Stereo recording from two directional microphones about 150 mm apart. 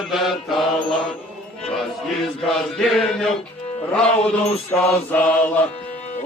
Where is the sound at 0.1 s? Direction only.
Centre (ahead or behind).